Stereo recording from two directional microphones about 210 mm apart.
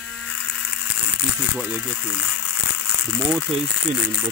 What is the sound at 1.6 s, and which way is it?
Speech, 5° right (ahead or behind).